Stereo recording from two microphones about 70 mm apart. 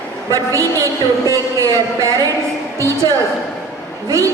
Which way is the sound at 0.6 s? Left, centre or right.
Right.